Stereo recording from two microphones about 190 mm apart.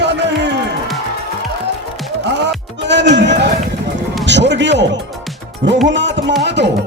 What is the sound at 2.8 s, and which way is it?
Music, 65° right (ahead or behind).